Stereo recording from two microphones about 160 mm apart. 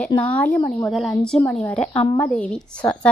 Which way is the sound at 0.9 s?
Centre (ahead or behind).